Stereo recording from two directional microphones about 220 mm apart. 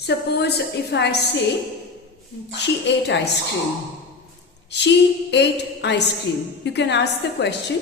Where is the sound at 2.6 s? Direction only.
50° left (ahead or behind).